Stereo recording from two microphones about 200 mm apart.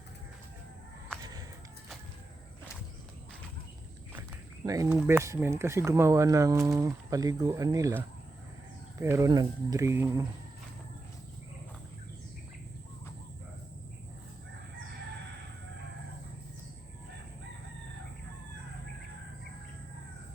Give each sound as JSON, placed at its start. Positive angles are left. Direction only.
{"t": 1.2, "sound": "a sound", "side_deg": -20}
{"t": 4.6, "sound": "speech", "side_deg": -15}
{"t": 9.0, "sound": "speech", "side_deg": -15}